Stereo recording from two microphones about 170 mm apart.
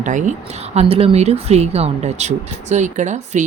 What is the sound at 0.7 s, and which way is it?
Speech, 35° right (ahead or behind).